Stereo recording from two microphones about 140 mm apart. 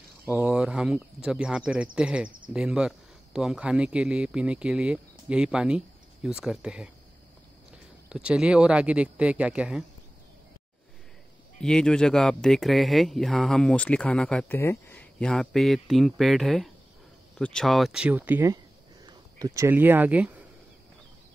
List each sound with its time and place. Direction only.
0.2 s speech: 10° right (ahead or behind)
11.6 s speech: 5° left (ahead or behind); by 18.5 s 15° right (ahead or behind)
19.0 s speech: 30° right (ahead or behind); by 20.4 s 10° right (ahead or behind)